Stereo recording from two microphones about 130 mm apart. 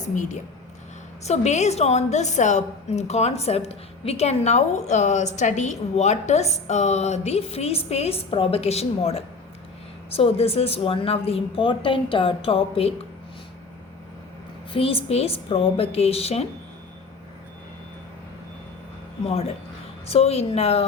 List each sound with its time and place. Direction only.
0.0 s a woman's voice: 70° left (ahead or behind)
1.2 s a woman's voice: 60° left (ahead or behind)
14.7 s a woman's voice: 45° left (ahead or behind)
19.2 s a woman's voice: 50° left (ahead or behind)